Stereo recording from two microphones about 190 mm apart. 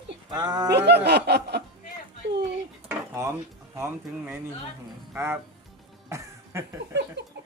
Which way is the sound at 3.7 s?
15° right (ahead or behind).